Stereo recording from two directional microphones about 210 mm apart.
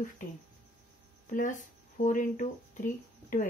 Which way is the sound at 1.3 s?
35° left (ahead or behind).